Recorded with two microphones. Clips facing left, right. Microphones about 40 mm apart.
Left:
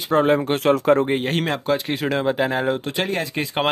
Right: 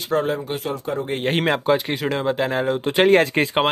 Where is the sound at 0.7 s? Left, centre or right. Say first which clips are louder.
Left 9 dB; left.